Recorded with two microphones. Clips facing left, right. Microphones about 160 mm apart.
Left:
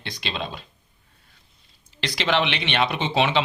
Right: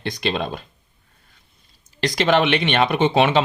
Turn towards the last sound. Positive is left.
turn(degrees=-55)  # may be behind; listen again after turning